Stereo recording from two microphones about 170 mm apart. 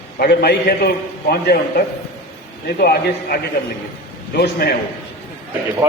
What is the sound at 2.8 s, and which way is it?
A man's voice, 65° left (ahead or behind).